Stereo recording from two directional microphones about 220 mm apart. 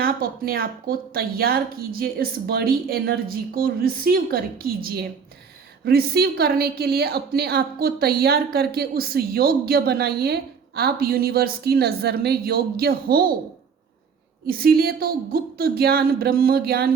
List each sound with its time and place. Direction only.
0.0 s a woman's voice: 40° right (ahead or behind)
14.4 s a woman's voice: 45° right (ahead or behind)